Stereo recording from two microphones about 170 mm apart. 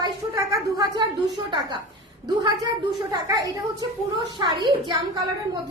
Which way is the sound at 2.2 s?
20° right (ahead or behind).